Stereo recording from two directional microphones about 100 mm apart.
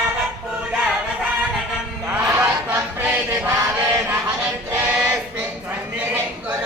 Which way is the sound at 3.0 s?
10° right (ahead or behind).